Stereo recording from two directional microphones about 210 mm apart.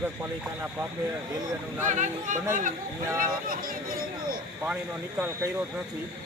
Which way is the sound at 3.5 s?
40° right (ahead or behind).